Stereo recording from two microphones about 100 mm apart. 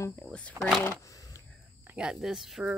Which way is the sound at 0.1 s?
10° left (ahead or behind).